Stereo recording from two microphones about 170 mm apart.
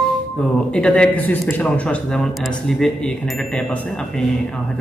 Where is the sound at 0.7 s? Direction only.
5° left (ahead or behind).